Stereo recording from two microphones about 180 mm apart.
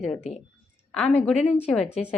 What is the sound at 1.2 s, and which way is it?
Speech, 5° left (ahead or behind).